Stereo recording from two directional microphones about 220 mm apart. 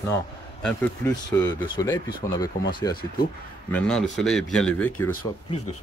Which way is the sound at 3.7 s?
5° left (ahead or behind).